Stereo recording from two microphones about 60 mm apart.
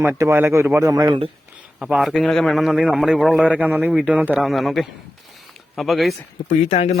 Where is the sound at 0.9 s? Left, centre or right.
Right.